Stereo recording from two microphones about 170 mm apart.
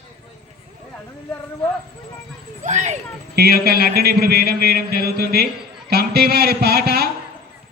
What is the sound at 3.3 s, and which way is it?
A man's voice, 65° right (ahead or behind).